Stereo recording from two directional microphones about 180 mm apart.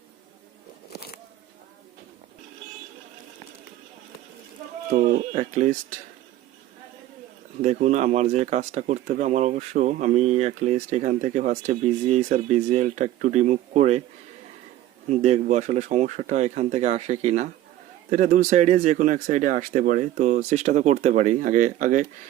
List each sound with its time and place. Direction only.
5.1 s speech: 40° right (ahead or behind)
7.6 s speech: 40° right (ahead or behind)
15.1 s speech: 40° right (ahead or behind)